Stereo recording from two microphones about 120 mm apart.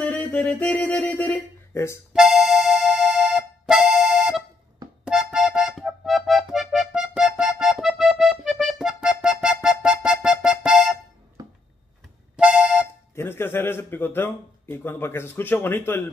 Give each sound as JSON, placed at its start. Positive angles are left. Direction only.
{"t": 0.0, "sound": "speech", "side_deg": 10}
{"t": 2.1, "sound": "music", "side_deg": -5}
{"t": 12.4, "sound": "music", "side_deg": -10}
{"t": 13.1, "sound": "a man's voice", "side_deg": 20}